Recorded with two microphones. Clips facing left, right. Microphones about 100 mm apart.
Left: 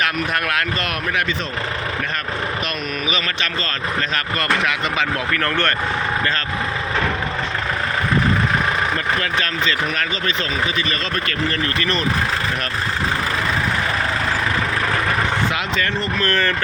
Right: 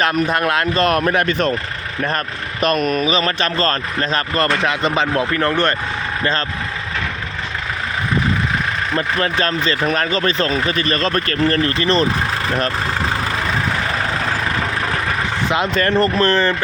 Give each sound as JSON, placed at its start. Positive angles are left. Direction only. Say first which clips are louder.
{"t": 0.0, "sound": "speech", "louder": "right 5 dB", "side_deg": -30}
{"t": 2.6, "sound": "speech", "louder": "right 8 dB", "side_deg": -45}
{"t": 9.0, "sound": "speech", "louder": "right 3 dB", "side_deg": -35}
{"t": 15.7, "sound": "speech", "louder": "right 6 dB", "side_deg": -45}
{"t": 16.2, "sound": "speech", "louder": "right 4 dB", "side_deg": -20}